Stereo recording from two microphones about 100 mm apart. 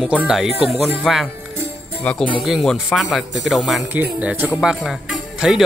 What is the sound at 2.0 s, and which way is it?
Speech, 15° left (ahead or behind).